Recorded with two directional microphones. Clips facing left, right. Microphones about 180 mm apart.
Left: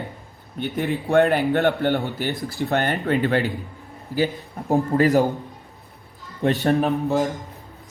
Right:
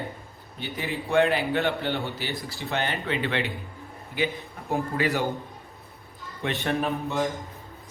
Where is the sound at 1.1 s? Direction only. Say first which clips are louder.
Left 5 dB; 55° left (ahead or behind).